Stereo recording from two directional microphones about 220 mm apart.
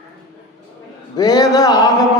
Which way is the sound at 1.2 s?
15° left (ahead or behind).